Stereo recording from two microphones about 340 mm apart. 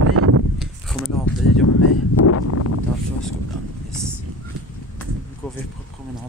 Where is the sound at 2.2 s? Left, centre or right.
Left.